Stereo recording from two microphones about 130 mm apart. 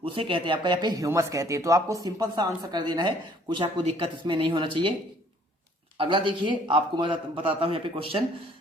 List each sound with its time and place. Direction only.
0.0 s speech: 45° right (ahead or behind)
3.8 s speech: 45° right (ahead or behind)
6.0 s speech: 40° right (ahead or behind)